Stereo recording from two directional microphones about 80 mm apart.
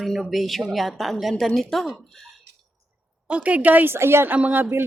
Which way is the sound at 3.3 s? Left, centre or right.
Centre.